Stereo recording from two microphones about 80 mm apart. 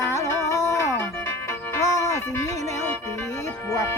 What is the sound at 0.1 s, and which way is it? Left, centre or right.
Music, left.